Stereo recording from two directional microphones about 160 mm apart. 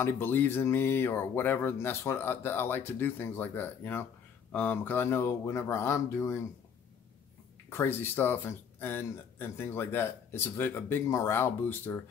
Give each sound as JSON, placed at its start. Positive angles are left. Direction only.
{"t": 0.0, "sound": "speech", "side_deg": 15}
{"t": 7.7, "sound": "speech", "side_deg": 15}